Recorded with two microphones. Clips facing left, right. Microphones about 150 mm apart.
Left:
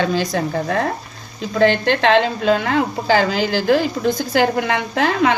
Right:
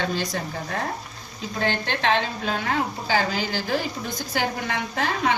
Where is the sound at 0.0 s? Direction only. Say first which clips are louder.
Left 8 dB; 90° left.